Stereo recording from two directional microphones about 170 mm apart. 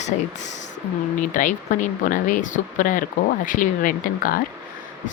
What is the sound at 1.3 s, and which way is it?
Speech, 50° left (ahead or behind).